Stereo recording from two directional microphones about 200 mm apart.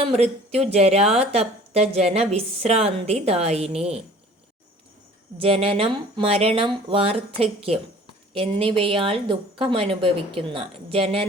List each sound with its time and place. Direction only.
0.0 s speech: 30° right (ahead or behind)
5.4 s a woman's voice: 30° right (ahead or behind)